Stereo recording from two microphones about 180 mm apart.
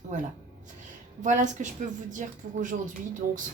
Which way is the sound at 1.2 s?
45° right (ahead or behind).